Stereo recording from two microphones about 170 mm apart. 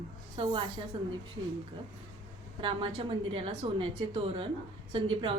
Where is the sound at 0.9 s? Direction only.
30° right (ahead or behind).